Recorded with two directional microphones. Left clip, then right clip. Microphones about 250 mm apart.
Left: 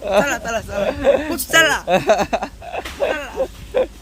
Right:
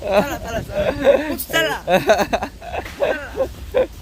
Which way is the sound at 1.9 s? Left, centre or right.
Centre.